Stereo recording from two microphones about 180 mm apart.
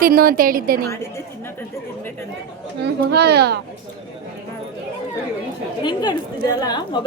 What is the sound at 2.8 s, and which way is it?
Speech, 65° right (ahead or behind).